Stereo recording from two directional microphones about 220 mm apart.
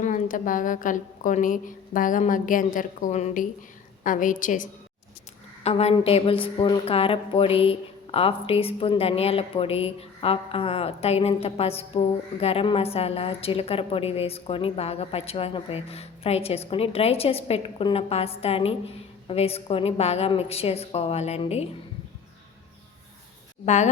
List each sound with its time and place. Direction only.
0.0 s a woman's voice: 35° left (ahead or behind)
23.6 s a woman's voice: 30° left (ahead or behind)